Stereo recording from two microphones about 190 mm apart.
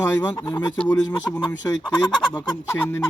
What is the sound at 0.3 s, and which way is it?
Speech, 20° left (ahead or behind).